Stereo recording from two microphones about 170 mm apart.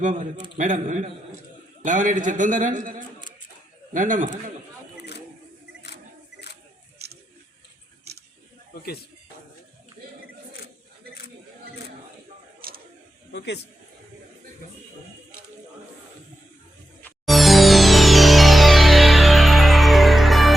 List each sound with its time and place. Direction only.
0.0 s a man's voice: 50° right (ahead or behind)
8.7 s speech: 65° left (ahead or behind)
12.6 s a sound: 60° right (ahead or behind)
13.3 s a man's voice: 90° left
17.0 s music: centre (ahead or behind)